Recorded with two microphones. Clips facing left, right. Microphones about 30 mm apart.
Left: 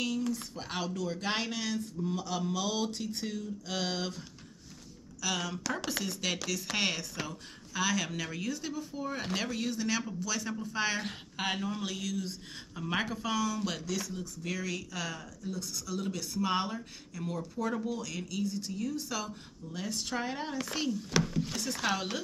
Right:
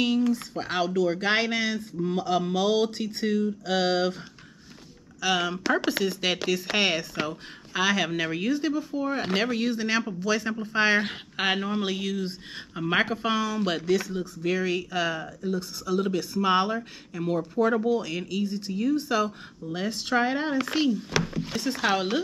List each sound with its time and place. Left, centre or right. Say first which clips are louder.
0.6 s speech: right 10 dB; right
5.2 s speech: right 9 dB; right